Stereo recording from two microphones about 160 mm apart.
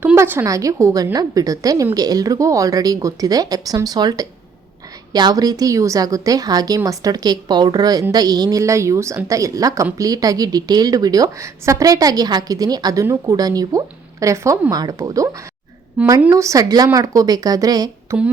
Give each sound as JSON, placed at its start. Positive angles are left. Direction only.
{"t": 0.0, "sound": "a woman's voice", "side_deg": -10}